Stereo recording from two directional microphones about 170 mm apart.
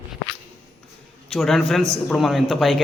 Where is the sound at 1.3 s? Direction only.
Centre (ahead or behind).